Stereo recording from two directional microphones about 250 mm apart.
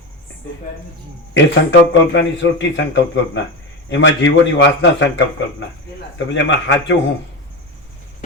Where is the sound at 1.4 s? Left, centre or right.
Left.